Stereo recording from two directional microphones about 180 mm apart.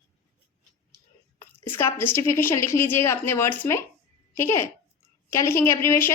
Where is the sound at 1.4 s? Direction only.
15° left (ahead or behind).